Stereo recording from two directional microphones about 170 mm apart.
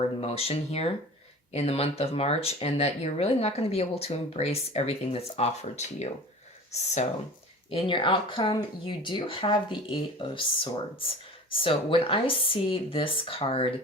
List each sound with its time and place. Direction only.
0.2 s speech: 35° left (ahead or behind)